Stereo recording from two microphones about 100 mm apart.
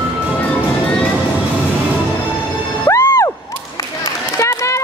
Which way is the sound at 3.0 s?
25° left (ahead or behind).